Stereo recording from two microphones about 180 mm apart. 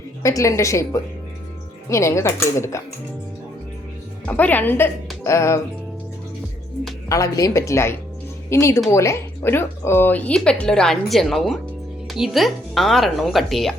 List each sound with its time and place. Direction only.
0.2 s speech: 15° left (ahead or behind)
1.9 s speech: 15° left (ahead or behind)
4.3 s speech: 10° left (ahead or behind)
7.1 s a woman's voice: 15° left (ahead or behind); by 13.7 s centre (ahead or behind)